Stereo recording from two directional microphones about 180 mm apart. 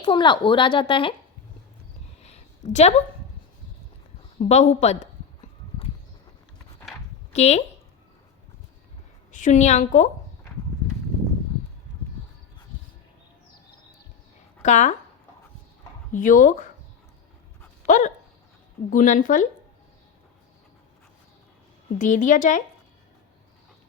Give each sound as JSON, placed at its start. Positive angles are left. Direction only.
{"t": 0.0, "sound": "speech", "side_deg": 25}
{"t": 2.2, "sound": "a sound", "side_deg": 40}
{"t": 4.4, "sound": "speech", "side_deg": 40}
{"t": 7.3, "sound": "speech", "side_deg": 40}
{"t": 9.3, "sound": "a woman's voice", "side_deg": 45}
{"t": 14.6, "sound": "speech", "side_deg": 40}
{"t": 16.1, "sound": "a woman's voice", "side_deg": 45}
{"t": 17.8, "sound": "dog", "side_deg": 45}
{"t": 18.9, "sound": "a woman's voice", "side_deg": 45}
{"t": 21.9, "sound": "a woman's voice", "side_deg": 45}